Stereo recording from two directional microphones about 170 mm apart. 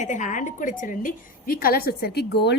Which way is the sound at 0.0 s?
45° left (ahead or behind).